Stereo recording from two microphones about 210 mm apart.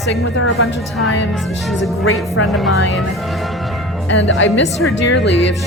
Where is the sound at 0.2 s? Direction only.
80° left.